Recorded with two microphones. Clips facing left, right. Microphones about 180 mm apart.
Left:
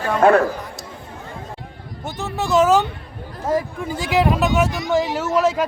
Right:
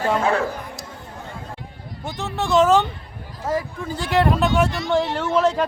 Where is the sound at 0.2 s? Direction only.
55° left (ahead or behind).